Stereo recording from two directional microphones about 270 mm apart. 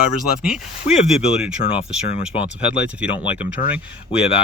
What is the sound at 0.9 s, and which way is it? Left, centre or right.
Speech, left.